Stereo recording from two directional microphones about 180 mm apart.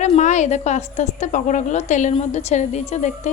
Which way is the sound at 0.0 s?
40° left (ahead or behind).